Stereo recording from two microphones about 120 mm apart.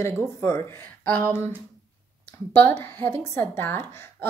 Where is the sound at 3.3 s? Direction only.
15° left (ahead or behind).